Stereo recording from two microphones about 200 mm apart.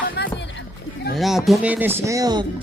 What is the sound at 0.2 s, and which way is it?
Rowboat, 55° left (ahead or behind).